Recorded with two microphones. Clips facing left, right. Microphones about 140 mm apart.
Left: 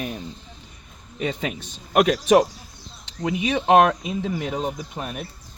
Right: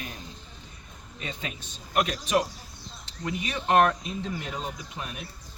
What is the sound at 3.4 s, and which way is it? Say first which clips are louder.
Speech: left 6 dB; 80° left.